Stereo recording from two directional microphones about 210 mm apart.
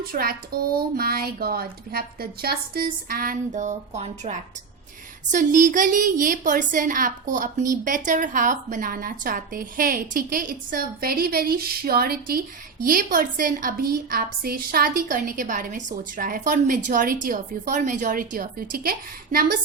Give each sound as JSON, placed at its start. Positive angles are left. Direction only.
{"t": 0.0, "sound": "a woman's voice", "side_deg": -45}